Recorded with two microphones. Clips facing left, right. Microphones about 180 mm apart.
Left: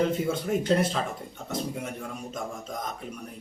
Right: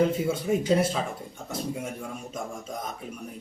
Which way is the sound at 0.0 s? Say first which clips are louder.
Right 2 dB; 5° right (ahead or behind).